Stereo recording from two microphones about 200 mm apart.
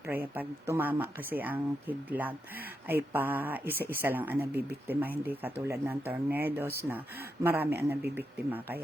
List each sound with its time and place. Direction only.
0.1 s speech: 10° right (ahead or behind)